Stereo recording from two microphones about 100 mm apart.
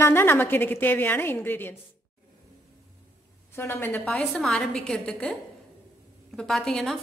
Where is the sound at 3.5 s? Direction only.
25° left (ahead or behind).